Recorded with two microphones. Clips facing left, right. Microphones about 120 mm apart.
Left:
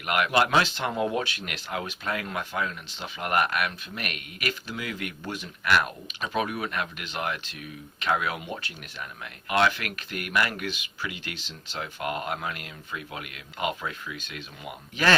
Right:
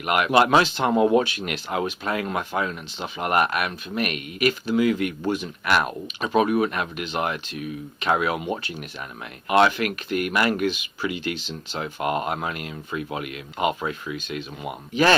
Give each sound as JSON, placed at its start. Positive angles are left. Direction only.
{"t": 0.0, "sound": "speech", "side_deg": -20}